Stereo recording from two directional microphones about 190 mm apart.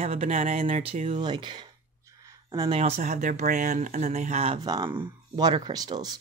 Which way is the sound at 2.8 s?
35° right (ahead or behind).